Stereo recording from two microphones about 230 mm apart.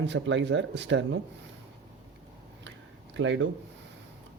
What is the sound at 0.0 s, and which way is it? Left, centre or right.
Speech, right.